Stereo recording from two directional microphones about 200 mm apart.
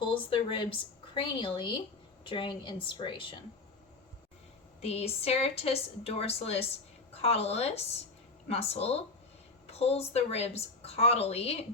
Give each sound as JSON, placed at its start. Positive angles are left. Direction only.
{"t": 0.1, "sound": "a woman's voice", "side_deg": 25}
{"t": 4.8, "sound": "a woman's voice", "side_deg": 30}